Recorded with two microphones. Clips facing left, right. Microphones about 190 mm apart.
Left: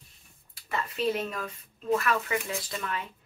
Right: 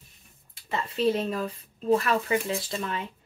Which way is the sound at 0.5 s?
25° right (ahead or behind).